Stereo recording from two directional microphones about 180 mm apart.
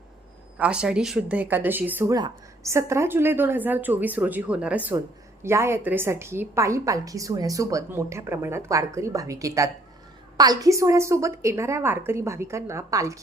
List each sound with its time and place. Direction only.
0.6 s speech: 5° right (ahead or behind)